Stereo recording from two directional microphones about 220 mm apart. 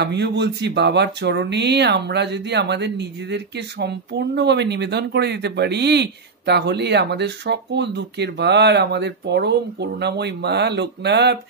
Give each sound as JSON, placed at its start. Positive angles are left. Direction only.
{"t": 0.0, "sound": "speech", "side_deg": -50}